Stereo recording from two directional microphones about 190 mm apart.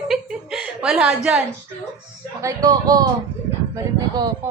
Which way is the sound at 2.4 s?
20° right (ahead or behind).